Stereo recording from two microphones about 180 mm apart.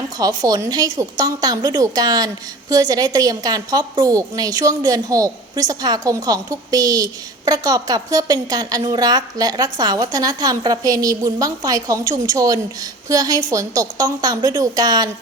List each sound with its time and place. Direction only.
0.2 s a woman's voice: 20° right (ahead or behind)